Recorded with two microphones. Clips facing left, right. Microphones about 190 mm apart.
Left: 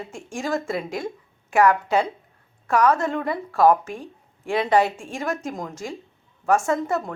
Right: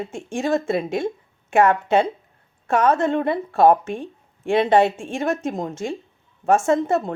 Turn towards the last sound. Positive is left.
turn(degrees=-25)  # may be behind; listen again after turning